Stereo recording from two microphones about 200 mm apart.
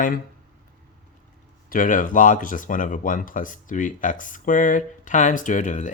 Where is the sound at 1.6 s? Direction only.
45° left (ahead or behind).